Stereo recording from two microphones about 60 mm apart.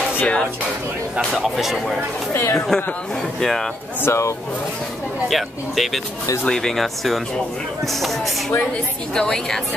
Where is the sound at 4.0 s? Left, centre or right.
Left.